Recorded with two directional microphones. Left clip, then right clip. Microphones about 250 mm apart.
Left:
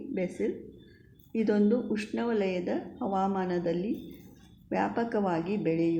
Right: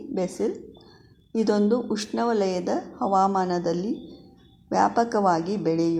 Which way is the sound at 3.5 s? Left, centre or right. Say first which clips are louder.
Right 5 dB; right.